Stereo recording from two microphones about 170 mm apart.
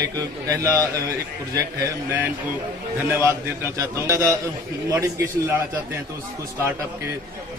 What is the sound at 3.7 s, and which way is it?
Speech, 15° right (ahead or behind).